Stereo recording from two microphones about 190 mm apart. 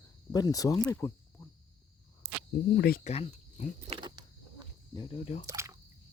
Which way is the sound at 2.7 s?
55° left (ahead or behind).